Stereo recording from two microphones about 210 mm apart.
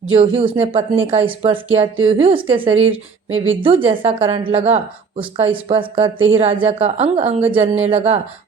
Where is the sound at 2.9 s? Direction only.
70° right (ahead or behind).